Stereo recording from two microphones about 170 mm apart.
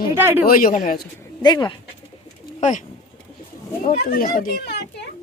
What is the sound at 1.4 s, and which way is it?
Speech, 25° left (ahead or behind).